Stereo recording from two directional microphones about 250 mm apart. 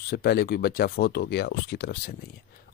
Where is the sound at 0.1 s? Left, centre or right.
Left.